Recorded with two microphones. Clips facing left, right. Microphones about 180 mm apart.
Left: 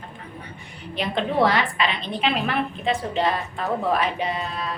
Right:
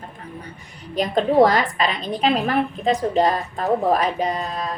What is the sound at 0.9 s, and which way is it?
A woman's voice, 40° right (ahead or behind).